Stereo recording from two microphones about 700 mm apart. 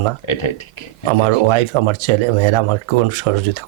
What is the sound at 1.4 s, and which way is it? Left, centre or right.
Speech, right.